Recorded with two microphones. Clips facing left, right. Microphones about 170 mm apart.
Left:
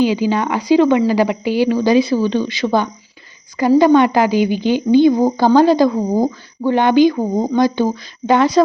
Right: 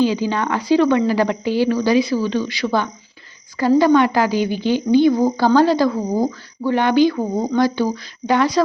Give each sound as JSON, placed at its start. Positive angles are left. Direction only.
{"t": 0.0, "sound": "speech", "side_deg": 15}